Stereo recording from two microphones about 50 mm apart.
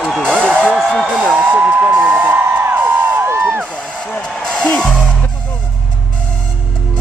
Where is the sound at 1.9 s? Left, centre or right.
Right.